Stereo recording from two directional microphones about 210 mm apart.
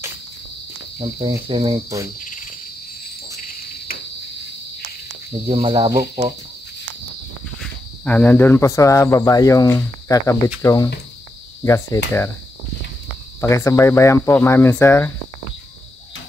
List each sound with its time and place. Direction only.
0.9 s cricket: 25° right (ahead or behind)
3.4 s cricket: 45° left (ahead or behind)
5.5 s cricket: 25° right (ahead or behind)
8.0 s speech: 5° left (ahead or behind)
13.4 s speech: 15° left (ahead or behind)